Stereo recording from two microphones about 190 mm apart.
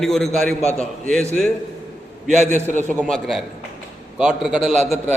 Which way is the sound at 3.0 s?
Centre (ahead or behind).